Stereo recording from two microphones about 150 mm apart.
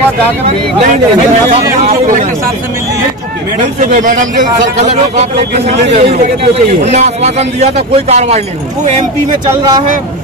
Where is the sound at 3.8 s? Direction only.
55° right (ahead or behind).